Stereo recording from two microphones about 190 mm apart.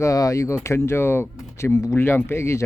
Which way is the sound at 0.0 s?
15° left (ahead or behind).